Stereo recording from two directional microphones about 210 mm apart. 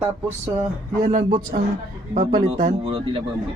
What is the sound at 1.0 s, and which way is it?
Speech, 40° right (ahead or behind).